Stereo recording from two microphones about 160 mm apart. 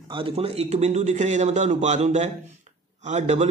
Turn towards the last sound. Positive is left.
turn(degrees=-45)  # may be behind; listen again after turning